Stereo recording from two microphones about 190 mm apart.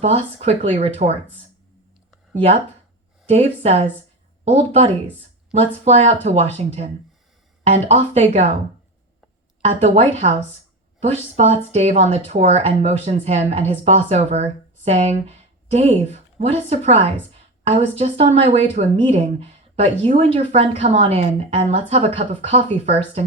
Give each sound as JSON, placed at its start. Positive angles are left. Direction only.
{"t": 0.0, "sound": "speech", "side_deg": -35}
{"t": 3.2, "sound": "speech", "side_deg": -35}
{"t": 9.6, "sound": "speech", "side_deg": -35}
{"t": 11.3, "sound": "speech", "side_deg": -35}